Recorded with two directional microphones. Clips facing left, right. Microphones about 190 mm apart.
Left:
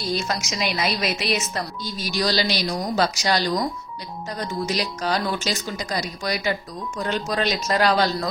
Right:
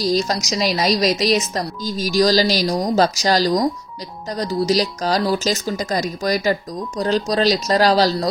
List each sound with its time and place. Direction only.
0.1 s speech: 35° right (ahead or behind)